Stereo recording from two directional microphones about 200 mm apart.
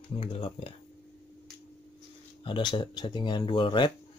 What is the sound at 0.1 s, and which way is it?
Speech, 30° left (ahead or behind).